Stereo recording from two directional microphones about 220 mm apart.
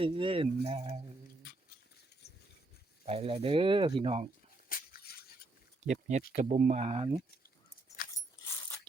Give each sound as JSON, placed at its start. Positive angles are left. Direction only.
{"t": 0.0, "sound": "speech", "side_deg": -25}
{"t": 3.1, "sound": "speech", "side_deg": -25}
{"t": 4.7, "sound": "a sound", "side_deg": 40}
{"t": 5.8, "sound": "speech", "side_deg": -30}
{"t": 8.0, "sound": "dog", "side_deg": 40}